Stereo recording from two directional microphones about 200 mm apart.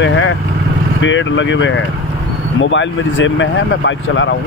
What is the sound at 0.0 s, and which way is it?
Vehicle, 75° left (ahead or behind).